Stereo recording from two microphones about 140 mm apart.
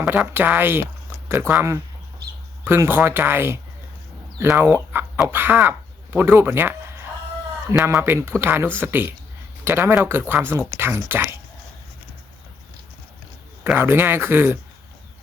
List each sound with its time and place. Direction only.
0.0 s speech: 10° right (ahead or behind)
7.9 s speech: 20° right (ahead or behind)
13.7 s speech: 15° right (ahead or behind)